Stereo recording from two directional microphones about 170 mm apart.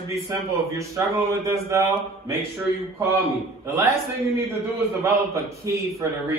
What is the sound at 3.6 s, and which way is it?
Speech, 20° right (ahead or behind).